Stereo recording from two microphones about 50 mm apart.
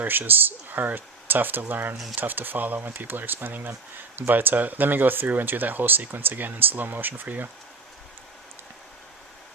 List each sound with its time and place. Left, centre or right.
0.0 s speech: right